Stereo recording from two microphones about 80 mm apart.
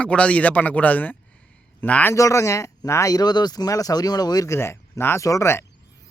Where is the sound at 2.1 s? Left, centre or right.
Left.